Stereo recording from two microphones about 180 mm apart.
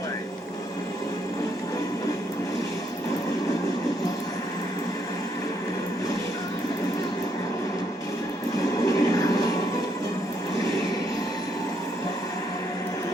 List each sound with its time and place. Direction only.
8.9 s vehicle: 20° left (ahead or behind)